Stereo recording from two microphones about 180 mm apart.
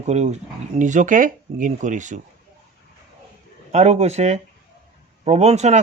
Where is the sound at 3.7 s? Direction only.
40° right (ahead or behind).